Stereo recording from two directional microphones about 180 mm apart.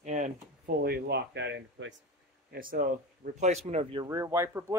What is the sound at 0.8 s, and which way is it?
Speech, 65° right (ahead or behind).